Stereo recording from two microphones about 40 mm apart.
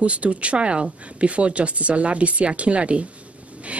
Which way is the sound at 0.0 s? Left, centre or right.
Right.